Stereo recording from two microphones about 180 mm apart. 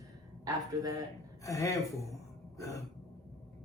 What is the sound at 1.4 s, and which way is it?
Speech, 15° left (ahead or behind).